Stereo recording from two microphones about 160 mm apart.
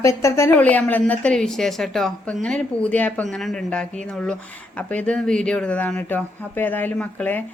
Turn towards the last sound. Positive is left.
turn(degrees=10)  # may be behind; listen again after turning